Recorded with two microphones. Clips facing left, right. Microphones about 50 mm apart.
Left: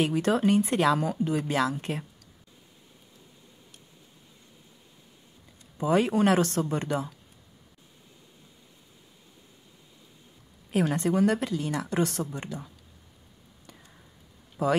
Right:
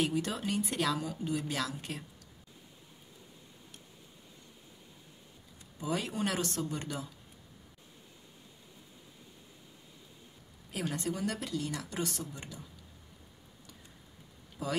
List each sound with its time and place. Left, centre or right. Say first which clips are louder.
0.1 s speech: left 10 dB; left
1.6 s speech: left 9 dB; left
5.8 s speech: left 11 dB; left
10.7 s speech: left 10 dB; left
14.6 s speech: left 11 dB; left